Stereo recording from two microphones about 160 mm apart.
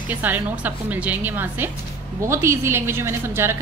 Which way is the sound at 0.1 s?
10° right (ahead or behind).